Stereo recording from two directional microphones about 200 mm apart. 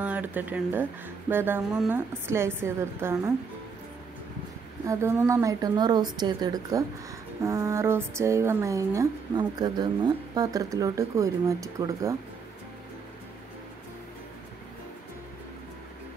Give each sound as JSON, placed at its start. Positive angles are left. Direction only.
{"t": 0.0, "sound": "speech", "side_deg": -10}
{"t": 4.8, "sound": "speech", "side_deg": -15}